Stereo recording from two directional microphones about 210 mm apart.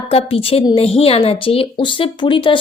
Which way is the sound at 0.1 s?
25° left (ahead or behind).